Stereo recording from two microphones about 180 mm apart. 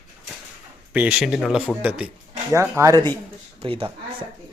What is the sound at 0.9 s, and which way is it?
Speech, 10° right (ahead or behind).